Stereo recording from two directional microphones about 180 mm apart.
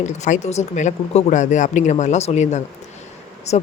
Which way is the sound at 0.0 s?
40° left (ahead or behind).